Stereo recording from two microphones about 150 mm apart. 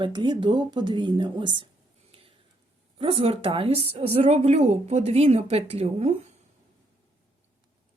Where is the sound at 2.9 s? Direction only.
35° right (ahead or behind).